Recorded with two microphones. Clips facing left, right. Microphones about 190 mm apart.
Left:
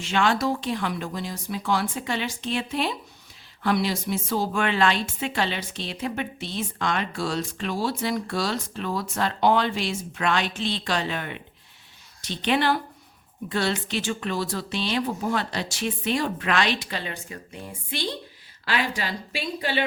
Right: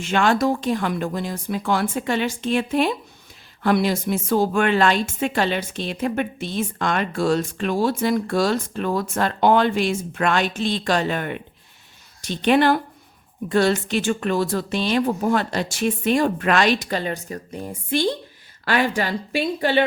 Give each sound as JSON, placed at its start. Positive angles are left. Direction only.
{"t": 0.0, "sound": "a woman's voice", "side_deg": -50}